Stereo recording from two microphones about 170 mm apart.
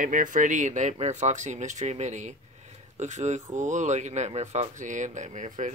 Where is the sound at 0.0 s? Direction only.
50° right (ahead or behind).